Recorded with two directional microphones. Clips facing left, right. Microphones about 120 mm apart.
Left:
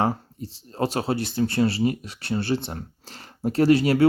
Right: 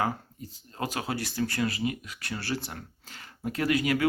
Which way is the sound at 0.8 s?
30° left (ahead or behind).